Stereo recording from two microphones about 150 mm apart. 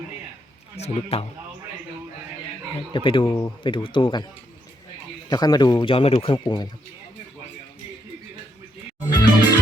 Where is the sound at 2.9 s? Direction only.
35° left (ahead or behind).